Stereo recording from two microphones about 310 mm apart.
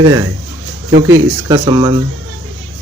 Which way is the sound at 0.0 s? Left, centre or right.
Centre.